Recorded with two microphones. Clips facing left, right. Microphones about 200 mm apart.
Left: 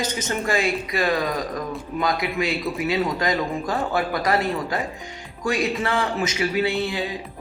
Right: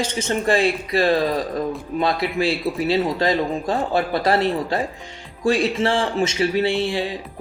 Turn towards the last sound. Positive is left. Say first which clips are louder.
# right 3 dB
turn(degrees=-30)  # may be behind; listen again after turning